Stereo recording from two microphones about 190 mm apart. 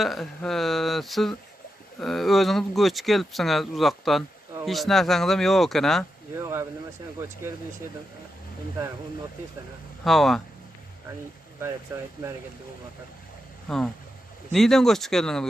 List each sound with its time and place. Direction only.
0.0 s speech: centre (ahead or behind)
6.3 s speech: 15° right (ahead or behind)
10.0 s speech: centre (ahead or behind)
11.9 s speech: 15° right (ahead or behind)
13.7 s speech: 5° left (ahead or behind)